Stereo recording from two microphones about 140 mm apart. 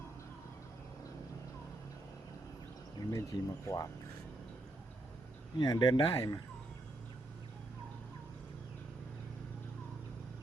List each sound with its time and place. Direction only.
3.1 s speech: 25° left (ahead or behind)
5.5 s speech: 30° left (ahead or behind)